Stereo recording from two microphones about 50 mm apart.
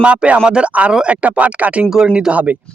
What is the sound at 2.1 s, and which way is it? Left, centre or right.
Speech, right.